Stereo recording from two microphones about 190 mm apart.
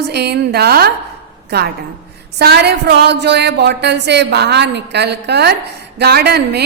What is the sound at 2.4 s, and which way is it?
Music, 60° right (ahead or behind).